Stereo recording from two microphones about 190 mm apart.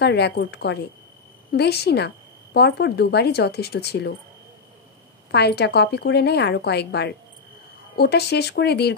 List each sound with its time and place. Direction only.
0.0 s a woman's voice: 60° left (ahead or behind)
5.3 s a woman's voice: 60° left (ahead or behind)